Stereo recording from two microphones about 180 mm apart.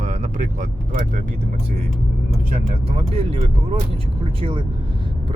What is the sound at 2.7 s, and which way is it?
Speech, 30° right (ahead or behind).